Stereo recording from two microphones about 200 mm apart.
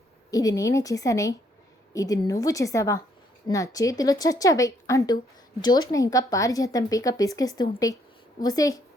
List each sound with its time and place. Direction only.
0.3 s a woman's voice: 15° left (ahead or behind)